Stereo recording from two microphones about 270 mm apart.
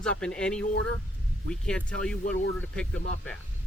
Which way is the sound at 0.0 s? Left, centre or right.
Centre.